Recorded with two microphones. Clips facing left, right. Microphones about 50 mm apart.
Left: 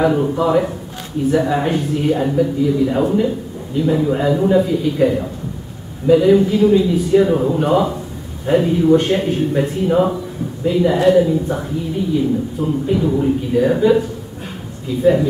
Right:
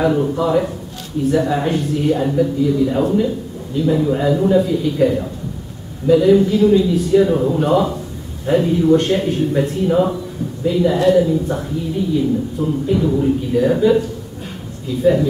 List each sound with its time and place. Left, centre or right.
0.0 s speech: centre